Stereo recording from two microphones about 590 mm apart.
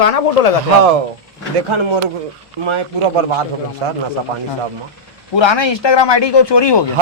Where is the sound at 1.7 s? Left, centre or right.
Right.